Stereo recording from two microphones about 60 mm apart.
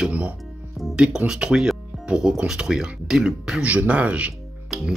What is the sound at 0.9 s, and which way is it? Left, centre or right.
Speech, centre.